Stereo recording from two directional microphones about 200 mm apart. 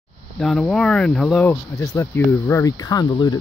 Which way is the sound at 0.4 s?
Centre (ahead or behind).